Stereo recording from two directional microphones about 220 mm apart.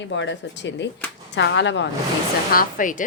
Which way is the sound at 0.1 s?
55° left (ahead or behind).